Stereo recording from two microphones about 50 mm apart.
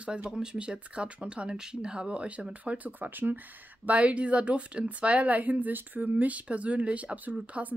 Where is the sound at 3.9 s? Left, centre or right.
Right.